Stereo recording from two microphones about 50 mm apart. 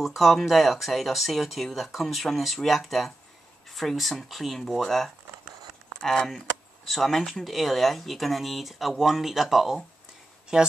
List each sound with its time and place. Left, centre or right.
0.0 s speech: centre
10.5 s speech: centre